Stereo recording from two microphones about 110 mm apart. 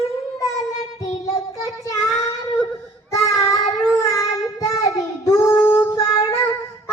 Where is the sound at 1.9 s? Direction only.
30° left (ahead or behind).